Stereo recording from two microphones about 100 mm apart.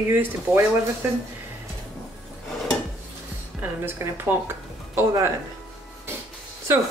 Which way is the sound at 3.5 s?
20° right (ahead or behind).